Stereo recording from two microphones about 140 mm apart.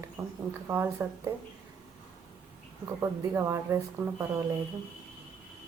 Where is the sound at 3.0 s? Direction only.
20° right (ahead or behind).